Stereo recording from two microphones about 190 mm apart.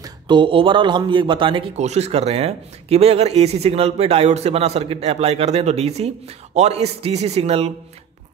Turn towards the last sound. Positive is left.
turn(degrees=-30)  # may be behind; listen again after turning